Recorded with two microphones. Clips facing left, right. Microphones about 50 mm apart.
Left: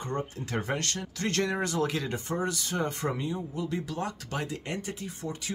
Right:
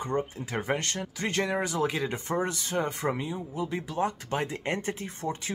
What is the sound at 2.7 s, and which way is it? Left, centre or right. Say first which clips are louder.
Speech: right 3 dB; centre.